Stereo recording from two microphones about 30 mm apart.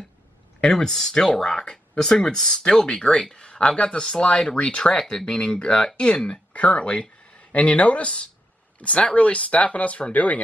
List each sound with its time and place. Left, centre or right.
0.7 s speech: centre
4.6 s speech: left
4.9 s speech: centre
6.3 s speech: left